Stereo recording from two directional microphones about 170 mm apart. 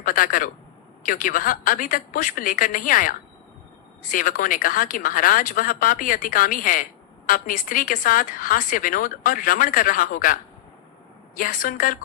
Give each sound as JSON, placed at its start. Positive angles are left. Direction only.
{"t": 0.0, "sound": "a woman's voice", "side_deg": 55}
{"t": 11.3, "sound": "a woman's voice", "side_deg": 55}